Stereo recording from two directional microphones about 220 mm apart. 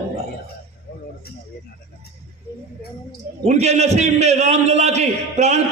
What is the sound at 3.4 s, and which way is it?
A man's voice, 30° right (ahead or behind).